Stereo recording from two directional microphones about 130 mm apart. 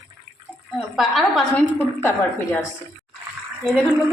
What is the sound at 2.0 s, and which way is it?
Speech, 20° left (ahead or behind).